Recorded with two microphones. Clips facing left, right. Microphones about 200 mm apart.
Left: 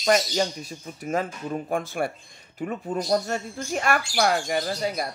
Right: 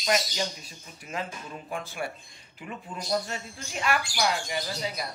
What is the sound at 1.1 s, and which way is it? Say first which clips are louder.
Speech: left 9 dB; 50° left (ahead or behind).